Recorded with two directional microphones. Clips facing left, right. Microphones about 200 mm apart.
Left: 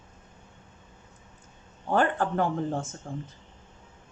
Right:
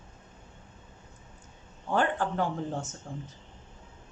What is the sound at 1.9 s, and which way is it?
Speech, 55° left (ahead or behind).